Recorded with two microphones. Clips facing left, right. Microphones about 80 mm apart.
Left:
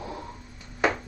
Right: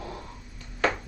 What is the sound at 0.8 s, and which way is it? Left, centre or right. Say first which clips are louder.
Music: left 1 dB; centre.